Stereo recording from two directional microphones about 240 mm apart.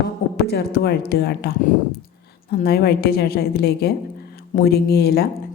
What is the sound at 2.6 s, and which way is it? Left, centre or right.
A woman's voice, left.